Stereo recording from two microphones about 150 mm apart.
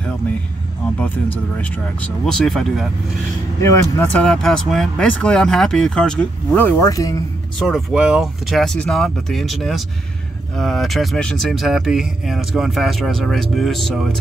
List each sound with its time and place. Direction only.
0.9 s speech: 10° left (ahead or behind)
3.6 s speech: 20° left (ahead or behind)
4.1 s speech: 5° left (ahead or behind)
6.9 s speech: 25° left (ahead or behind)
7.5 s speech: centre (ahead or behind)